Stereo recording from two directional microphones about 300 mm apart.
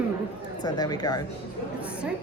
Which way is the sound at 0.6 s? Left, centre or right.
Centre.